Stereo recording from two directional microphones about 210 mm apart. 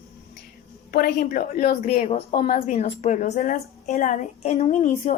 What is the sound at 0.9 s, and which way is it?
A woman's voice, 45° left (ahead or behind).